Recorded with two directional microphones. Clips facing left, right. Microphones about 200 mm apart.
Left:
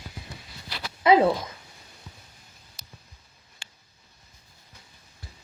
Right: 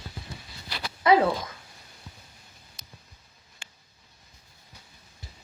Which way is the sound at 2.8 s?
Centre (ahead or behind).